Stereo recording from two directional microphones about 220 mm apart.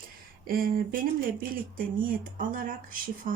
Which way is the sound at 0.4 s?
40° right (ahead or behind).